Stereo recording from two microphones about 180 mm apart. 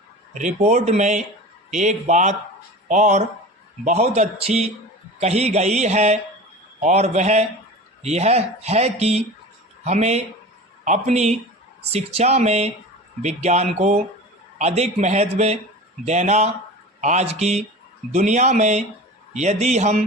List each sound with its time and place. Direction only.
0.3 s speech: 40° right (ahead or behind)